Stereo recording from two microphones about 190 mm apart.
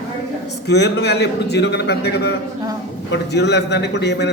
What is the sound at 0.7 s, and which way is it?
A man's voice, 60° left (ahead or behind).